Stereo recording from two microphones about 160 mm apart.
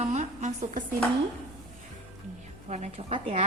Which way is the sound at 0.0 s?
45° right (ahead or behind).